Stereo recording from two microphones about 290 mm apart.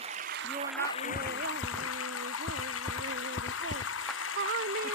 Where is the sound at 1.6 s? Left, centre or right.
Left.